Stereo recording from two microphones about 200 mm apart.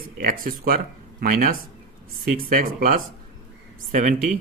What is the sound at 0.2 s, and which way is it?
Speech, 45° right (ahead or behind).